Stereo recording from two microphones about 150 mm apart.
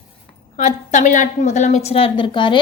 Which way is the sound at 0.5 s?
55° left (ahead or behind).